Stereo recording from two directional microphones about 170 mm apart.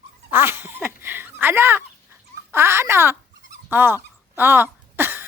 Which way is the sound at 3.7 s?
10° right (ahead or behind).